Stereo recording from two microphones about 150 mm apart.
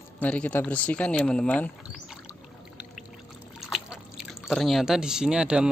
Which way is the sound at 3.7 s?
5° right (ahead or behind).